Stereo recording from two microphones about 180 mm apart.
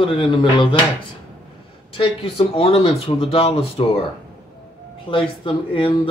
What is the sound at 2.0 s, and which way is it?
Speech, 30° left (ahead or behind).